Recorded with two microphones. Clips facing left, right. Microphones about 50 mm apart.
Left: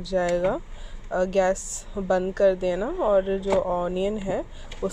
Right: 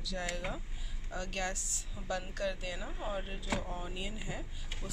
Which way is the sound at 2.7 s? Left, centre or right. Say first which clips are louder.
Left 18 dB; left.